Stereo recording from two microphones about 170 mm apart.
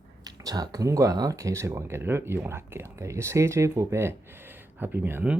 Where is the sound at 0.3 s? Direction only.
20° right (ahead or behind).